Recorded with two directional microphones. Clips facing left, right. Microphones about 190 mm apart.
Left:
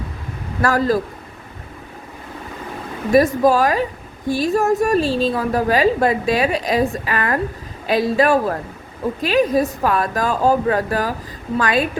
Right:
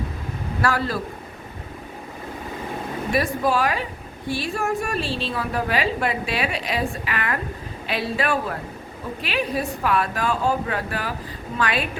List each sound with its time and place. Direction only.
0.6 s a man's voice: 40° left (ahead or behind)
3.1 s a woman's voice: 40° left (ahead or behind)